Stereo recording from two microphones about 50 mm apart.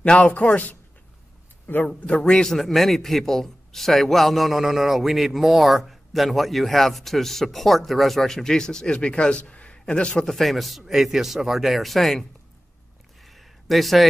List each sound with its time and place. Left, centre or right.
0.0 s speech: left
1.9 s a man's voice: left
2.5 s a man's voice: centre
10.2 s a man's voice: centre
13.2 s a sound: centre